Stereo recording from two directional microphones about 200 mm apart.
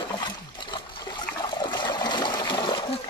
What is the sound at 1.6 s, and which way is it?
Water, 20° left (ahead or behind).